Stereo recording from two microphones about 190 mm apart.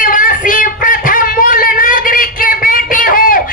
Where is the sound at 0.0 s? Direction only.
45° left (ahead or behind).